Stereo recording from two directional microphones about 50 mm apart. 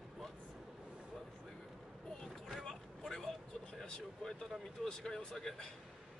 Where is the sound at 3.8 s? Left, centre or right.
Centre.